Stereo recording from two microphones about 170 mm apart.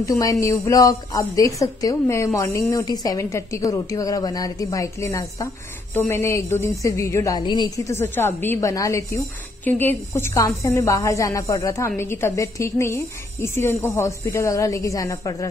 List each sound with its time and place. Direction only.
0.0 s a woman's voice: 20° left (ahead or behind)